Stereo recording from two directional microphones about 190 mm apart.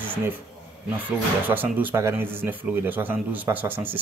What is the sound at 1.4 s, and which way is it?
Speech, 10° right (ahead or behind).